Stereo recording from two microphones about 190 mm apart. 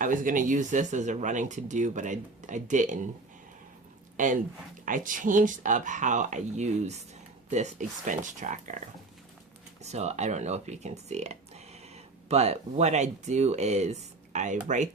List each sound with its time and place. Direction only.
0.0 s speech: 45° right (ahead or behind)
4.2 s speech: 40° right (ahead or behind)
9.8 s speech: 35° right (ahead or behind)